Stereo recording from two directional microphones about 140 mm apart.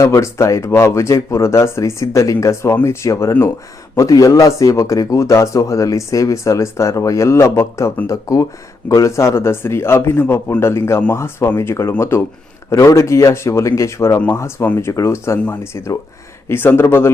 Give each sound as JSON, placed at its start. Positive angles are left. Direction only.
{"t": 0.0, "sound": "a man's voice", "side_deg": 20}